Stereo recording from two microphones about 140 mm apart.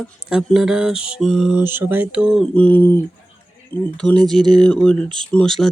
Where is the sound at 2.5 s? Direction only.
10° left (ahead or behind).